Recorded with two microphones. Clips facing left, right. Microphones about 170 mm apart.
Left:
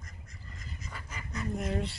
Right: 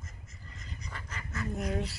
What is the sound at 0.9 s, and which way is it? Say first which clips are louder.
Goose: right 2 dB; 5° left (ahead or behind).